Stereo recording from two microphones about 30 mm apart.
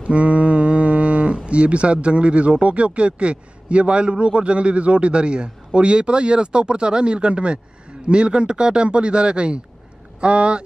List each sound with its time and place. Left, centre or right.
0.0 s a man's voice: right